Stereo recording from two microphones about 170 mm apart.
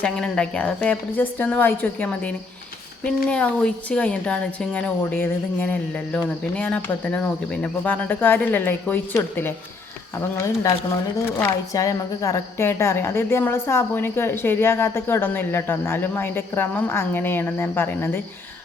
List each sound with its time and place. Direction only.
0.0 s a woman's voice: 5° left (ahead or behind)